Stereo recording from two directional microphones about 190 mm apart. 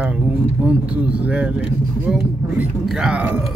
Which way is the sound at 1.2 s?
5° right (ahead or behind).